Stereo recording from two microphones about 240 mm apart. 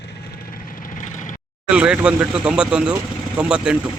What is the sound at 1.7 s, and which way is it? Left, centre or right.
A man's voice, centre.